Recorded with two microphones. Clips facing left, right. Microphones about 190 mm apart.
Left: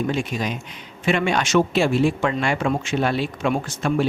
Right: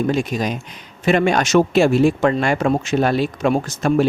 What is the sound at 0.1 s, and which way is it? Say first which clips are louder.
Speech: right 4 dB; 40° right (ahead or behind).